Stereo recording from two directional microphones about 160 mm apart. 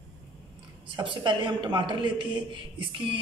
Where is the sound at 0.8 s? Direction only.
30° right (ahead or behind).